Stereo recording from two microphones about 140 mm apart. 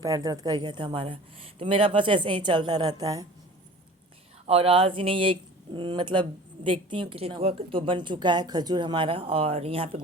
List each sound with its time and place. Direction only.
0.0 s a woman's voice: 25° right (ahead or behind)
4.4 s a woman's voice: 45° right (ahead or behind)